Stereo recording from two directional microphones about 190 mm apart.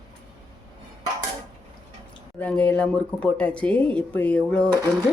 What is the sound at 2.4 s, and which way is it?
Speech, 5° left (ahead or behind).